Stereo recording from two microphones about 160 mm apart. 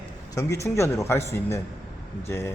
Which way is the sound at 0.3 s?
20° left (ahead or behind).